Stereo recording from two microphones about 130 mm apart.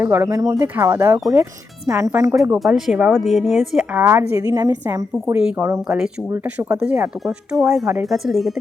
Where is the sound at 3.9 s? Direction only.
20° right (ahead or behind).